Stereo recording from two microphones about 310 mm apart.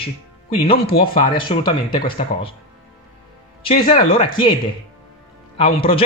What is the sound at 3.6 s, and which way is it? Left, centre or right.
Speech, centre.